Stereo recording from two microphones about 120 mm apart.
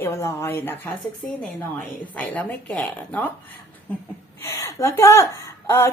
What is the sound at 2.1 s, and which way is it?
A woman's voice, 15° left (ahead or behind).